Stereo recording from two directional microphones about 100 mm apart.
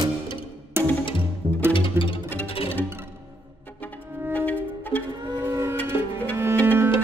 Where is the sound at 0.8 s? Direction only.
25° right (ahead or behind).